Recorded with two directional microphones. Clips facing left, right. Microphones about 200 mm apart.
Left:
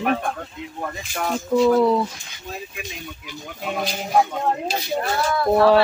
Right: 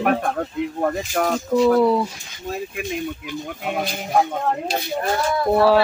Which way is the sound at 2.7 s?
55° right (ahead or behind).